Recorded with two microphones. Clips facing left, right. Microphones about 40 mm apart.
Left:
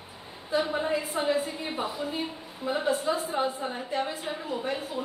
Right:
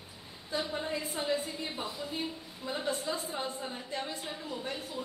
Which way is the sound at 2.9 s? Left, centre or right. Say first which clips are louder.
Left 7 dB; left.